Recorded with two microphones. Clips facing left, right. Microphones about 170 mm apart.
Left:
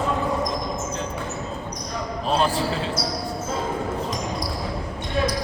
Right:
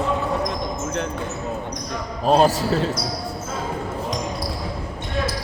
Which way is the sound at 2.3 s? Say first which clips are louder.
Right 6 dB; 45° right (ahead or behind).